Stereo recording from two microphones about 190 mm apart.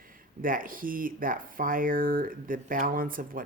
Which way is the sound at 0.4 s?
45° right (ahead or behind).